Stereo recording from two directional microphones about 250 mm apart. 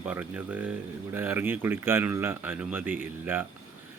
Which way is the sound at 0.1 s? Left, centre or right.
Centre.